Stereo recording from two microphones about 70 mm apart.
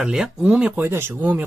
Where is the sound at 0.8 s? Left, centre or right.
Right.